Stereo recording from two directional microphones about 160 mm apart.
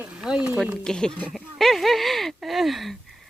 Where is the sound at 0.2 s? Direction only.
5° right (ahead or behind).